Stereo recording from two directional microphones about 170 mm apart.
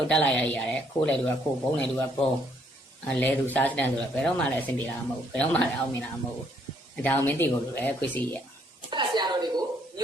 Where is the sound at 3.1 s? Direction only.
10° left (ahead or behind).